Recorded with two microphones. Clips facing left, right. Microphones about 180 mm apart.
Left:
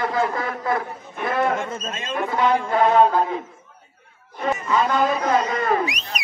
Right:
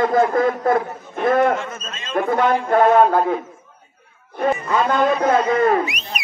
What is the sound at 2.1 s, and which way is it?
A man's voice, 55° right (ahead or behind).